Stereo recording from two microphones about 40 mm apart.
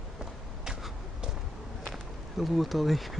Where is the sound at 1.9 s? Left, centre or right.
Centre.